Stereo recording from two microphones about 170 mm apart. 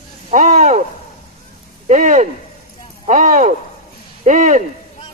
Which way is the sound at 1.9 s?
50° right (ahead or behind).